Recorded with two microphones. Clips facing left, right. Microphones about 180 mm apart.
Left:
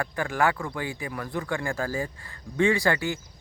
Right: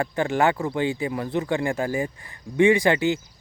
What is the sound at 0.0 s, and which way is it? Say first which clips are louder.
Speech: right 4 dB; 25° right (ahead or behind).